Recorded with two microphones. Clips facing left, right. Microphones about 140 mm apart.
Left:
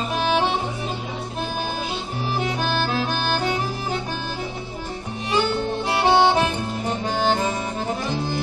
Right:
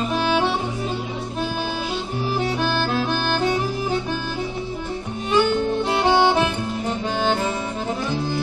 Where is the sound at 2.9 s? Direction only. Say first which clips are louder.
Right 1 dB; 5° left (ahead or behind).